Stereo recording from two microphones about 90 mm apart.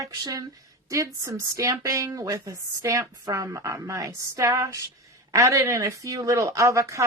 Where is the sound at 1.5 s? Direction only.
35° right (ahead or behind).